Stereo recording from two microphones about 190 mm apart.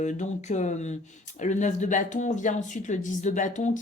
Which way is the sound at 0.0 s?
40° left (ahead or behind).